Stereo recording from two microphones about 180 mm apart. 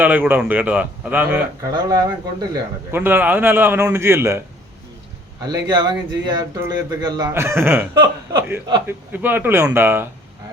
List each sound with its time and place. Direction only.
0.0 s a man's voice: 10° right (ahead or behind)
1.7 s speech: 20° right (ahead or behind)
2.9 s a man's voice: 10° right (ahead or behind)
5.5 s a man's voice: 25° right (ahead or behind)